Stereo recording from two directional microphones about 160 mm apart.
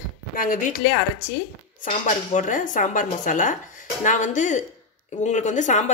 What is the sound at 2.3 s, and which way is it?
A woman's voice, 55° left (ahead or behind).